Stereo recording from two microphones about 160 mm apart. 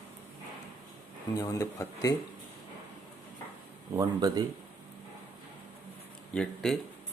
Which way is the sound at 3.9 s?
25° right (ahead or behind).